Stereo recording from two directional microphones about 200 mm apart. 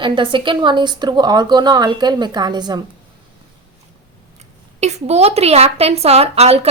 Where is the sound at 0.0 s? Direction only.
25° right (ahead or behind).